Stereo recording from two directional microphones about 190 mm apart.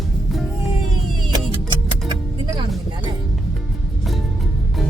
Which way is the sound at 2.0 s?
20° right (ahead or behind).